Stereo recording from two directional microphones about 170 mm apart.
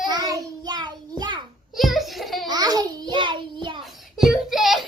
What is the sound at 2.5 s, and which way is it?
Child singing, 25° right (ahead or behind).